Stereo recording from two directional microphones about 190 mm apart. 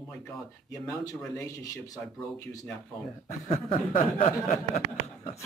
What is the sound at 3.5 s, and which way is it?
Speech, 35° left (ahead or behind).